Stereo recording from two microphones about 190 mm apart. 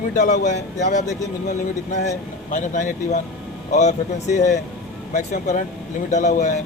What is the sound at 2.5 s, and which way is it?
Speech, 40° left (ahead or behind).